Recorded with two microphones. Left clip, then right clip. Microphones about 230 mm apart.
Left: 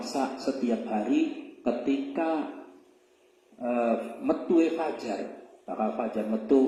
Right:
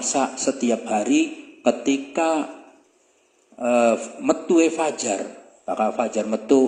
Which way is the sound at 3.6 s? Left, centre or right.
Right.